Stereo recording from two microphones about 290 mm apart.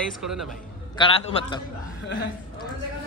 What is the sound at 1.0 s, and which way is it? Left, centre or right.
Speech, centre.